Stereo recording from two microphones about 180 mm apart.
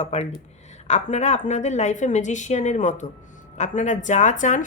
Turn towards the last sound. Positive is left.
turn(degrees=45)  # may be behind; listen again after turning